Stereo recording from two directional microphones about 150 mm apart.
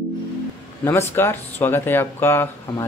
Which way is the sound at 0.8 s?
15° left (ahead or behind).